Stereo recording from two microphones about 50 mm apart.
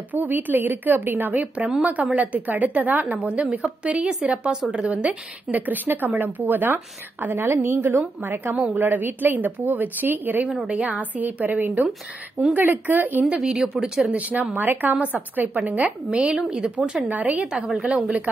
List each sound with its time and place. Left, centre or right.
0.1 s a woman's voice: right
3.2 s a woman's voice: right
4.9 s a woman's voice: right
8.7 s a woman's voice: right
10.7 s a woman's voice: right
12.4 s speech: centre
12.8 s a woman's voice: right
13.2 s speech: centre
14.1 s a woman's voice: right
16.1 s a woman's voice: right
17.8 s a woman's voice: right